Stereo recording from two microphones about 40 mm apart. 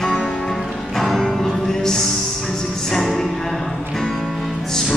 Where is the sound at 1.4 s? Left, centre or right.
Centre.